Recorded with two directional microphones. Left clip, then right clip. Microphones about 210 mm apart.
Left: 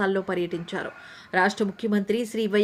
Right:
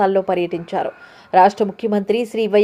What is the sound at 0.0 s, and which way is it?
A woman's voice, centre (ahead or behind).